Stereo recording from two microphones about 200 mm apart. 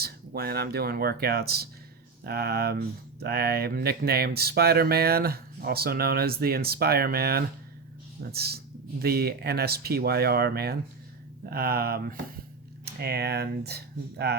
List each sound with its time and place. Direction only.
0.0 s speech: 50° right (ahead or behind)